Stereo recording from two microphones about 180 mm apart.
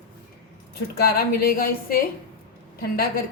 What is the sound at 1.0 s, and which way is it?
Speech, 55° left (ahead or behind).